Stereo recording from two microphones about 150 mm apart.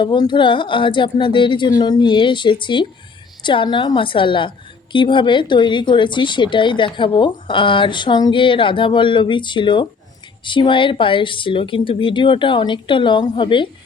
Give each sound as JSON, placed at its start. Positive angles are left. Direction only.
{"t": 0.0, "sound": "a woman's voice", "side_deg": 30}